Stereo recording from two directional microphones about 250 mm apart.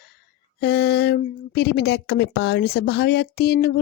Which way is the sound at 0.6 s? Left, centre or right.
Left.